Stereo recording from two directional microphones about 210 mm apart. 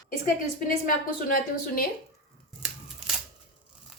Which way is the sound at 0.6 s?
40° left (ahead or behind).